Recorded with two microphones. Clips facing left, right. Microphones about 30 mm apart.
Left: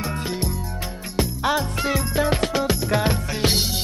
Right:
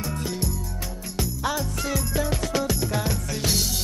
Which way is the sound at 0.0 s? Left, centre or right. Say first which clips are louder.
Left 3 dB; left.